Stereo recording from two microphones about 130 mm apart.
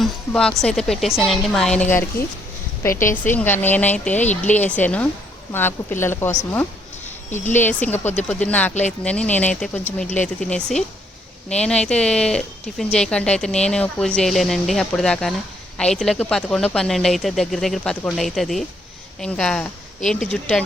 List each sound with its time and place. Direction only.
0.0 s a sound: 5° left (ahead or behind)
0.6 s a woman's voice: 5° left (ahead or behind)
4.2 s speech: 65° left (ahead or behind)
4.5 s speech: 10° left (ahead or behind)
7.0 s a sound: 65° left (ahead or behind)
7.5 s speech: 15° left (ahead or behind)